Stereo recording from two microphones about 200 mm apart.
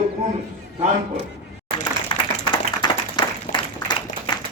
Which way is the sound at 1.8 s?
20° left (ahead or behind).